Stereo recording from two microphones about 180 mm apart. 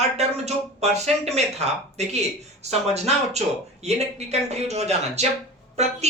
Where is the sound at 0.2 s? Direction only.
35° right (ahead or behind).